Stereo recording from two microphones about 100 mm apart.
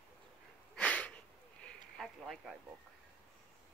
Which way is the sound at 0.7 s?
15° left (ahead or behind).